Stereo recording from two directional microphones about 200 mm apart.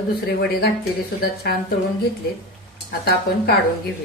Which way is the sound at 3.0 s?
50° left (ahead or behind).